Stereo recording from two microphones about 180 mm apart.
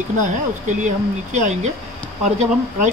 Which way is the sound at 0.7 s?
45° right (ahead or behind).